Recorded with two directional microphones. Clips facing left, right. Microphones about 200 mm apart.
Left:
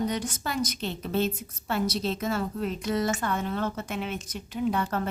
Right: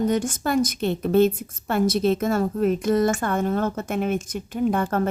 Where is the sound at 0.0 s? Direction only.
50° right (ahead or behind).